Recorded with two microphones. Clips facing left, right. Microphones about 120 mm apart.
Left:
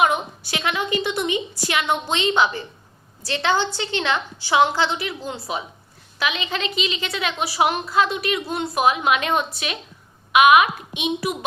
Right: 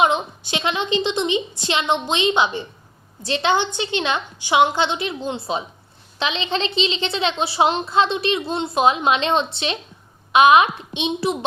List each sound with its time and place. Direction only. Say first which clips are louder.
0.0 s a woman's voice: right 1 dB; 20° right (ahead or behind)